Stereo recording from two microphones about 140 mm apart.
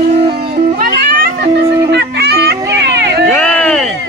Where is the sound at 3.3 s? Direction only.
5° left (ahead or behind).